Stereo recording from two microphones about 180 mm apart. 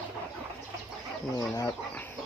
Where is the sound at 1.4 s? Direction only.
20° left (ahead or behind).